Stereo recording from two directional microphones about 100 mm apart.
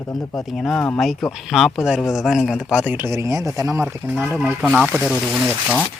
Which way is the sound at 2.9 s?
25° right (ahead or behind).